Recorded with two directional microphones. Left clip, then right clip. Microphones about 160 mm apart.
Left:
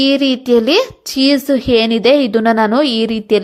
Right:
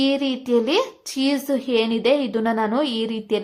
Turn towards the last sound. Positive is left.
turn(degrees=35)  # may be behind; listen again after turning